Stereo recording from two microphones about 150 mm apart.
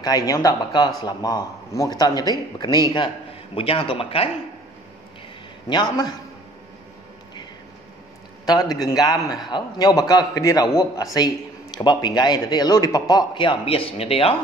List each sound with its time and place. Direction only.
0.0 s a man's voice: 25° left (ahead or behind)
5.7 s a man's voice: 30° left (ahead or behind)
8.5 s a man's voice: 25° left (ahead or behind); by 14.3 s 40° left (ahead or behind)